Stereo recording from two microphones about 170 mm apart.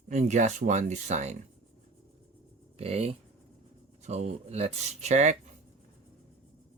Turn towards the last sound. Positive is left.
turn(degrees=-40)  # may be behind; listen again after turning